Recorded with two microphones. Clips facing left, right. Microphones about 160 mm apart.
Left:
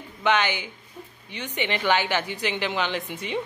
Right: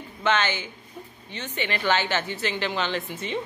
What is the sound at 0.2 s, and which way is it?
Speech, 15° left (ahead or behind).